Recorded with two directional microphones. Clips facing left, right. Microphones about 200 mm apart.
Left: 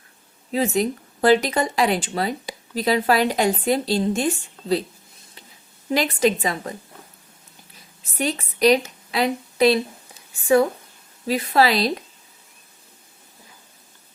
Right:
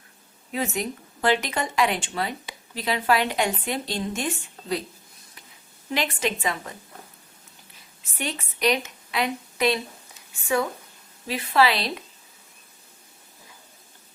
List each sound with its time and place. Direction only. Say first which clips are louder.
0.5 s speech: left 7 dB; 35° left (ahead or behind)
5.9 s speech: left 7 dB; 40° left (ahead or behind)
8.1 s a woman's voice: left 7 dB; 40° left (ahead or behind)
11.3 s speech: left 3 dB; 40° left (ahead or behind)